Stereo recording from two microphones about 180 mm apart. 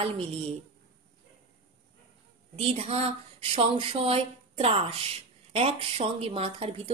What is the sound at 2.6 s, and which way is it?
Speech, 35° right (ahead or behind).